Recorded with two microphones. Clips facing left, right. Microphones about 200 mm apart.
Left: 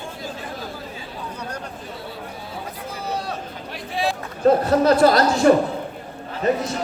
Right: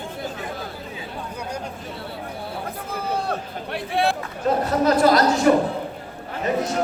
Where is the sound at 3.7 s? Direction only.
60° right (ahead or behind).